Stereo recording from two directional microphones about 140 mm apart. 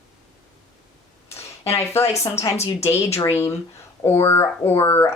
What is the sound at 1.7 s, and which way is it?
Speech, 20° left (ahead or behind).